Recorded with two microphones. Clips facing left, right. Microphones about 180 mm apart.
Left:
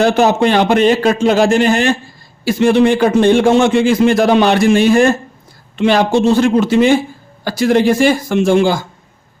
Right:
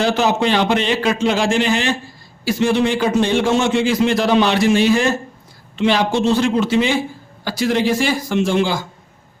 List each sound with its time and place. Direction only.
0.0 s speech: 50° left (ahead or behind)